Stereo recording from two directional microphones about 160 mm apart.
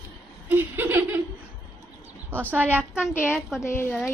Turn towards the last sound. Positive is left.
turn(degrees=15)  # may be behind; listen again after turning